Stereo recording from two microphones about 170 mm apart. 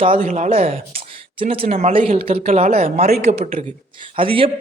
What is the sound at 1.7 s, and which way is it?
Speech, 35° right (ahead or behind).